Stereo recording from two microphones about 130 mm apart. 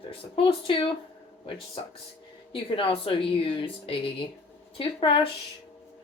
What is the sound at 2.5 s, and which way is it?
Speech, 45° left (ahead or behind).